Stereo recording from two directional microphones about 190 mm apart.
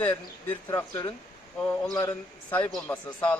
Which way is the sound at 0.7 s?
15° left (ahead or behind).